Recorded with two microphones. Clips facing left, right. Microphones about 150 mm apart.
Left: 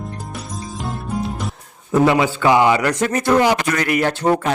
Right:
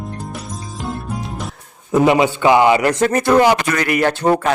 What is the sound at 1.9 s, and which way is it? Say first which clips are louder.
A man's voice: right 2 dB; 15° right (ahead or behind).